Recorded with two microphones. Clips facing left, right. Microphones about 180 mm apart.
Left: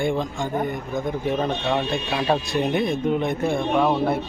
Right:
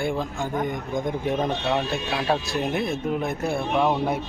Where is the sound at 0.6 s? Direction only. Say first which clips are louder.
Left 1 dB; 15° right (ahead or behind).